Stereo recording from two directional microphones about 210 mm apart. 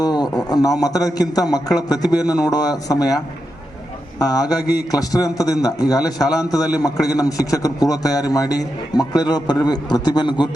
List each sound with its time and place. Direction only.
0.0 s a man's voice: 20° left (ahead or behind)
4.2 s a man's voice: 20° left (ahead or behind)